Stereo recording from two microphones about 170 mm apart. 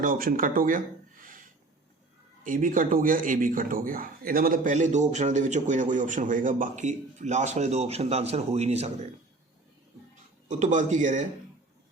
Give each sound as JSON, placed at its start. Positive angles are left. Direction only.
{"t": 0.0, "sound": "speech", "side_deg": -55}
{"t": 10.5, "sound": "speech", "side_deg": -45}